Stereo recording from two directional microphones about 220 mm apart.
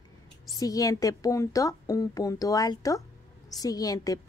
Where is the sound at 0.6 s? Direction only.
15° left (ahead or behind).